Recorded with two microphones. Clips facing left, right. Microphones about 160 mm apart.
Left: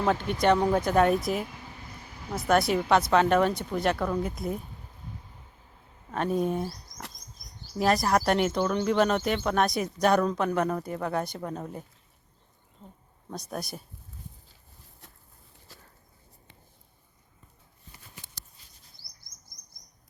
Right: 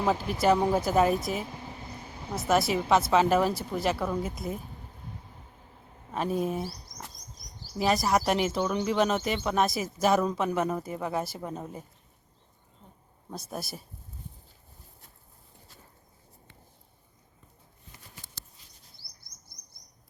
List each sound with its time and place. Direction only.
0.0 s speech: 5° right (ahead or behind)
2.5 s speech: centre (ahead or behind)
6.1 s speech: 5° right (ahead or behind)
7.8 s speech: centre (ahead or behind)
13.3 s speech: centre (ahead or behind)
15.7 s a sound: 90° left